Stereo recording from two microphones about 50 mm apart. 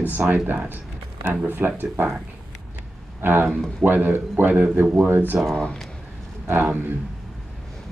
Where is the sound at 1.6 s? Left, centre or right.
Right.